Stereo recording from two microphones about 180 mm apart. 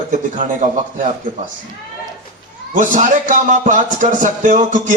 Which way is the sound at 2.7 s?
45° right (ahead or behind).